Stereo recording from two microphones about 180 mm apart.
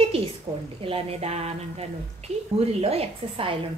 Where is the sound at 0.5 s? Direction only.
35° right (ahead or behind).